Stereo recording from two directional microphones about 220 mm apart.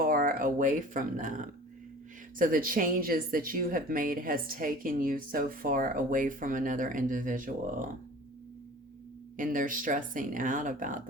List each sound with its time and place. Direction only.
0.0 s speech: 40° right (ahead or behind)
9.4 s speech: 35° right (ahead or behind)